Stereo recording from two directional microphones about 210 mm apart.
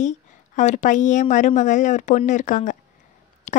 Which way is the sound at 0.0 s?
35° left (ahead or behind).